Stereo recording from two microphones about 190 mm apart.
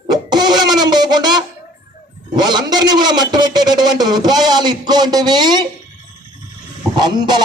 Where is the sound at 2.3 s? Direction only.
20° right (ahead or behind).